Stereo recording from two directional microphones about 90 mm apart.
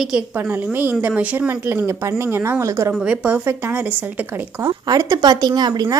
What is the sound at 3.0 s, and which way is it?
Speech, 15° right (ahead or behind).